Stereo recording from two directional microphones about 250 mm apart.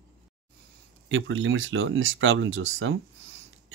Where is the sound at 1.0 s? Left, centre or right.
Right.